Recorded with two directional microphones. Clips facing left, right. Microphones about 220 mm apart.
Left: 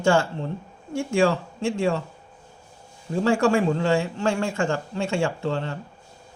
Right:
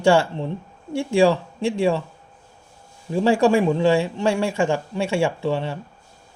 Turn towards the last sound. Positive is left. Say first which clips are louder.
# right 3 dB
turn(degrees=-15)  # may be behind; listen again after turning